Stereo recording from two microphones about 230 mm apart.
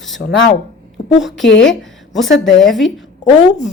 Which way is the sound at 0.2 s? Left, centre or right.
Left.